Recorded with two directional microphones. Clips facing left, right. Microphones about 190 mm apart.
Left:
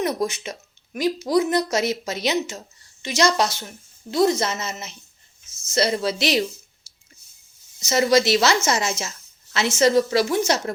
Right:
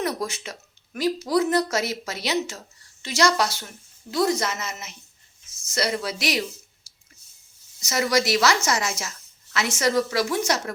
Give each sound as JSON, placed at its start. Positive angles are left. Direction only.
{"t": 0.0, "sound": "a woman's voice", "side_deg": 20}
{"t": 7.8, "sound": "a woman's voice", "side_deg": 25}